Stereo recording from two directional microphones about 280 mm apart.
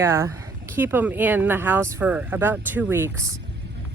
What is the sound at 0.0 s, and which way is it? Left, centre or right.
Speech, centre.